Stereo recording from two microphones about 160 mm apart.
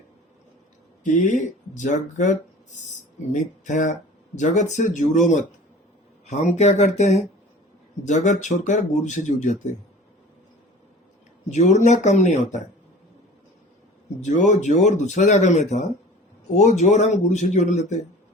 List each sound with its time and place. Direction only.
1.0 s speech: 50° left (ahead or behind)
11.5 s speech: 50° left (ahead or behind)
14.2 s speech: 50° left (ahead or behind)